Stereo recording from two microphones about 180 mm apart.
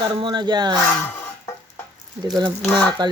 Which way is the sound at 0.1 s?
25° right (ahead or behind).